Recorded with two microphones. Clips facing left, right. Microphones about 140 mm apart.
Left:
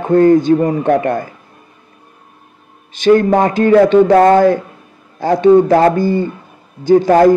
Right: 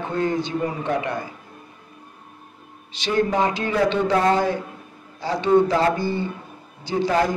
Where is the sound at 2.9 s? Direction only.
50° left (ahead or behind).